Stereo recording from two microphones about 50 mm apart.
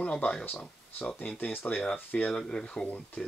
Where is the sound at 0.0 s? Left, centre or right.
Left.